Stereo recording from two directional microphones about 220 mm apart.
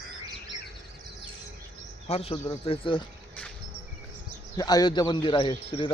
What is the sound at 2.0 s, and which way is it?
Speech, 25° left (ahead or behind).